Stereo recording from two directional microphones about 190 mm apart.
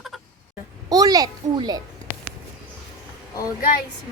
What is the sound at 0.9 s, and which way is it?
Speech, 20° right (ahead or behind).